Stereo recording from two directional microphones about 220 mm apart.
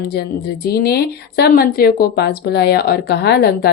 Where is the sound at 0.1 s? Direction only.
45° left (ahead or behind).